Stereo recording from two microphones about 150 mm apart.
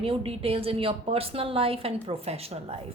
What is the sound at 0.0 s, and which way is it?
A woman's voice, 35° right (ahead or behind).